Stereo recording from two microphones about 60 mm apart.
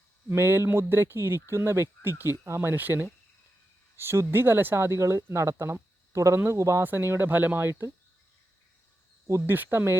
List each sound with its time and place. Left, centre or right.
0.3 s speech: right
2.7 s speech: right
3.9 s speech: right
6.8 s speech: right
7.3 s speech: right
9.5 s speech: right